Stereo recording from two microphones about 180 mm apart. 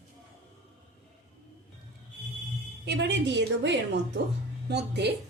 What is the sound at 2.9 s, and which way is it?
A woman's voice, 70° right (ahead or behind).